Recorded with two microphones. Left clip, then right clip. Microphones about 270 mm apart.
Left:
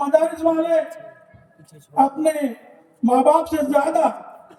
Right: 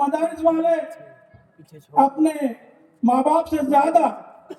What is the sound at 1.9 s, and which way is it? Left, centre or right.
A man's voice, right.